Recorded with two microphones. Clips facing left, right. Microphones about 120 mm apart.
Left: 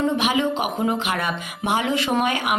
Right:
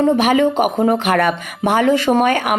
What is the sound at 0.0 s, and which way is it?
Speech, 50° right (ahead or behind).